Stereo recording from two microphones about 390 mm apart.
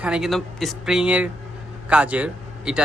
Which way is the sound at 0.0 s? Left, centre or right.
Centre.